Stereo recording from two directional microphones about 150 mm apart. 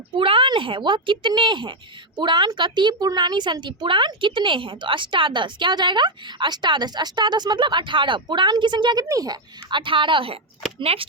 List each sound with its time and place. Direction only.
0.2 s a woman's voice: 35° right (ahead or behind)